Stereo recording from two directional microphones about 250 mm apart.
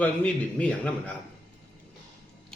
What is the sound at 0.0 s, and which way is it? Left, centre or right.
A man's voice, centre.